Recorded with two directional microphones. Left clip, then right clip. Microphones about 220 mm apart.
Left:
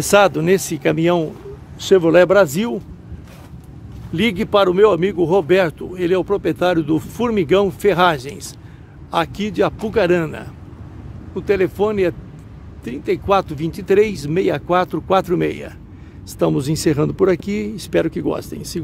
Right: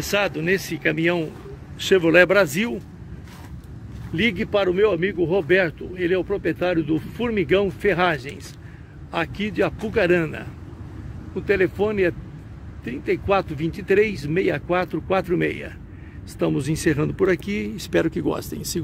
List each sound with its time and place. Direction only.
0.0 s speech: 25° left (ahead or behind)
4.1 s speech: 20° left (ahead or behind); by 18.8 s centre (ahead or behind)